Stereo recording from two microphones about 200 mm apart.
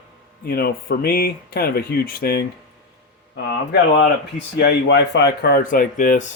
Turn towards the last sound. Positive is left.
turn(degrees=40)  # may be behind; listen again after turning